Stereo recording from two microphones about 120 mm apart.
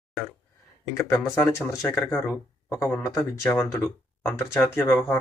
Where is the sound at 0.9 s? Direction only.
20° left (ahead or behind).